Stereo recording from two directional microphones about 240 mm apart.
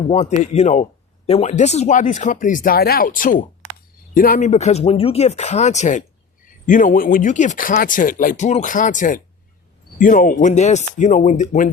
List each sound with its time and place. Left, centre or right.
0.1 s speech: left